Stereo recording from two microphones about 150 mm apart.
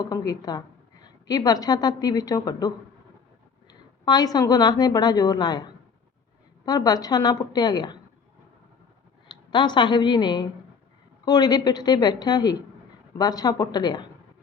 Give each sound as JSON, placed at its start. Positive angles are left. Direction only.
{"t": 0.1, "sound": "a woman's voice", "side_deg": 25}
{"t": 9.3, "sound": "a woman's voice", "side_deg": 30}